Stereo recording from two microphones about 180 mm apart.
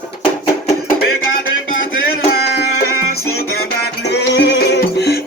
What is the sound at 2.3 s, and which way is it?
Music, 65° left (ahead or behind).